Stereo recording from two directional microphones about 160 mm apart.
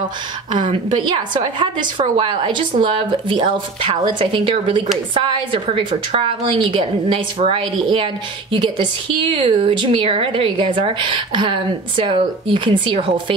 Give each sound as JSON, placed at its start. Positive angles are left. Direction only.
{"t": 0.5, "sound": "a woman's voice", "side_deg": -30}